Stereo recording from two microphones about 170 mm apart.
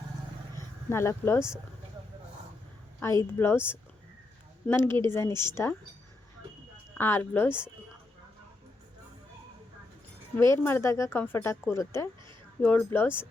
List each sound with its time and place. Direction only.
0.9 s speech: 15° left (ahead or behind)
3.3 s speech: 15° left (ahead or behind)
7.0 s speech: 10° left (ahead or behind)
10.3 s speech: 15° left (ahead or behind)